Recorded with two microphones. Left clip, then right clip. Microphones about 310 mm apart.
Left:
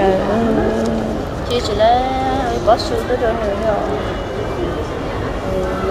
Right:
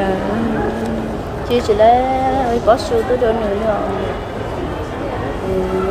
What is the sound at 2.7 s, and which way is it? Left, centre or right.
Speech, right.